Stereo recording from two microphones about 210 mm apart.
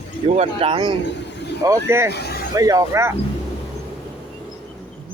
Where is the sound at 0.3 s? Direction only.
25° right (ahead or behind).